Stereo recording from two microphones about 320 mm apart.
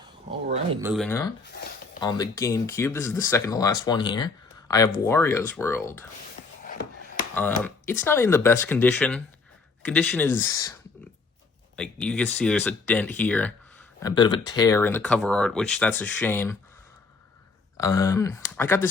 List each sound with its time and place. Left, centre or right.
0.5 s speech: centre
0.9 s speech: centre
7.6 s speech: centre
11.8 s speech: centre
17.7 s speech: centre